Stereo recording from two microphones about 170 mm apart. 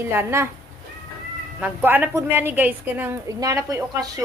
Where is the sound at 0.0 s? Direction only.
15° right (ahead or behind).